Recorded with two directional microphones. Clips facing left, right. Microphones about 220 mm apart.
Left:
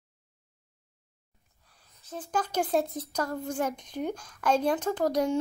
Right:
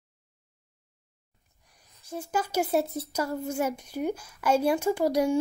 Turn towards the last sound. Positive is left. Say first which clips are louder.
# right 2 dB
turn(degrees=-10)  # may be behind; listen again after turning